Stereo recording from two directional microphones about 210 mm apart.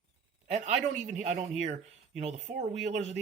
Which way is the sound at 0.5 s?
35° right (ahead or behind).